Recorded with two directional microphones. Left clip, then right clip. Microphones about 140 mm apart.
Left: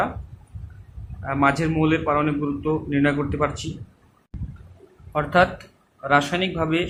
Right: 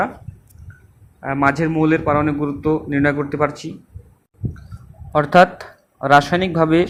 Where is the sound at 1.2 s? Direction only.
30° right (ahead or behind).